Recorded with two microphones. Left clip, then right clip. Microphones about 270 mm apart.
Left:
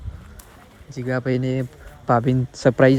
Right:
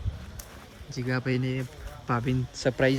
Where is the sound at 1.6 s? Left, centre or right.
Centre.